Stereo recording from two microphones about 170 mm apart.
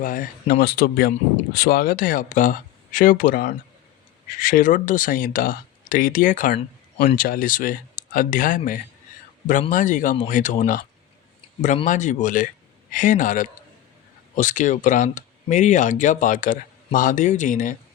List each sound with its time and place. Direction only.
0.0 s speech: 55° left (ahead or behind)
11.9 s speech: 50° left (ahead or behind)